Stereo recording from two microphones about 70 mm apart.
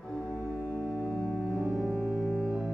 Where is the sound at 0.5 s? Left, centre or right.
Left.